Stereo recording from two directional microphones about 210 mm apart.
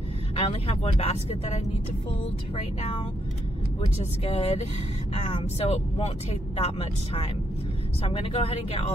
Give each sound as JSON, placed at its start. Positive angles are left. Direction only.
{"t": 0.4, "sound": "speech", "side_deg": 30}
{"t": 4.0, "sound": "speech", "side_deg": 30}